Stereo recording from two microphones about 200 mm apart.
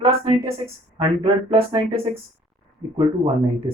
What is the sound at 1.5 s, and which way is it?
Speech, 25° right (ahead or behind).